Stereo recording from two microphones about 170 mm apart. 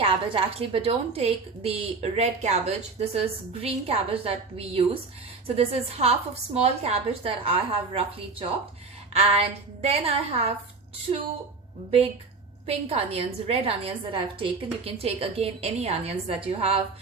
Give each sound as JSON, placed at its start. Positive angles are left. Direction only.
{"t": 0.0, "sound": "a woman's voice", "side_deg": -35}
{"t": 12.6, "sound": "a woman's voice", "side_deg": -35}